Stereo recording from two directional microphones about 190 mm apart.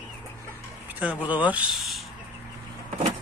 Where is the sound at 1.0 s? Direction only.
10° right (ahead or behind).